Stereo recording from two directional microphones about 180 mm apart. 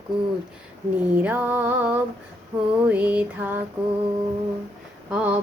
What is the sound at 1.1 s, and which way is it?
Female singing, 10° right (ahead or behind).